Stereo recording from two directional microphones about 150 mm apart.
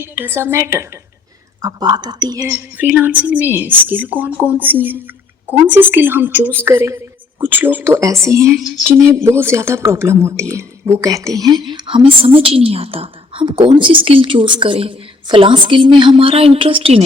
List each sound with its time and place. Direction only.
0.0 s a woman's voice: 15° right (ahead or behind)
2.5 s a woman's voice: 10° right (ahead or behind); by 17.0 s 40° right (ahead or behind)